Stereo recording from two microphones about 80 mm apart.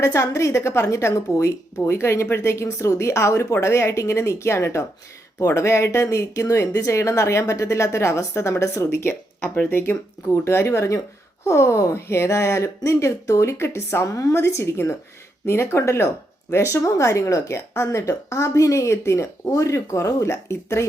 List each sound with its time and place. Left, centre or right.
0.0 s speech: left